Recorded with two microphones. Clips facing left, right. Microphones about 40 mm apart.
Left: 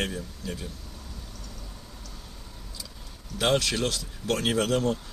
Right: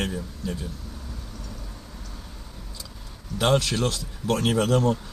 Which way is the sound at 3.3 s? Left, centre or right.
Centre.